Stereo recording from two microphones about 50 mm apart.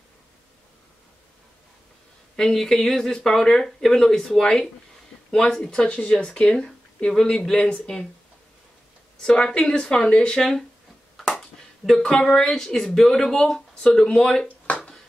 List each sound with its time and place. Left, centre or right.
2.3 s speech: centre
5.8 s speech: left
9.2 s speech: centre
11.1 s a sound: centre
12.0 s speech: centre